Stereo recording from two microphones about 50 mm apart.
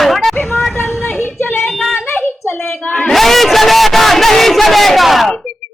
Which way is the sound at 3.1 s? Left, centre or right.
Centre.